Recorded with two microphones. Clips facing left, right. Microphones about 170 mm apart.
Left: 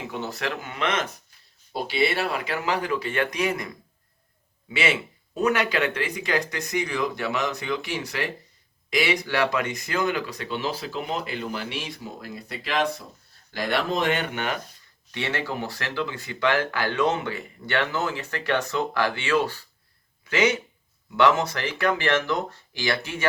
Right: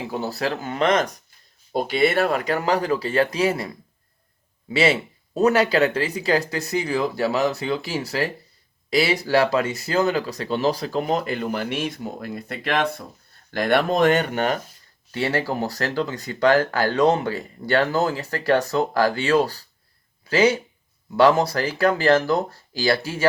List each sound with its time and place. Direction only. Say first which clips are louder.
0.1 s speech: right 5 dB; 35° right (ahead or behind)
4.7 s speech: right 6 dB; 35° right (ahead or behind)